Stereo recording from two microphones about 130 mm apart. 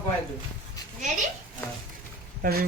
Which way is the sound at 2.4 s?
90° right.